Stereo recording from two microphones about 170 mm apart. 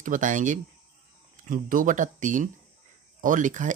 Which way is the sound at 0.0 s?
50° right (ahead or behind).